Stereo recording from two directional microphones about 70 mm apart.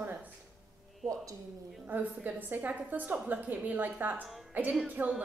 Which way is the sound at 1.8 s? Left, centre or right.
Right.